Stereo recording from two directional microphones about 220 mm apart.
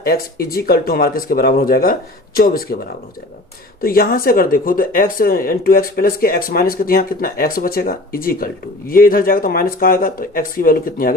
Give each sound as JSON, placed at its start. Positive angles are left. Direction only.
{"t": 0.0, "sound": "speech", "side_deg": 45}